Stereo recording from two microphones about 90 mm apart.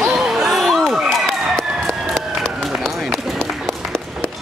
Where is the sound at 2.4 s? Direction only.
5° left (ahead or behind).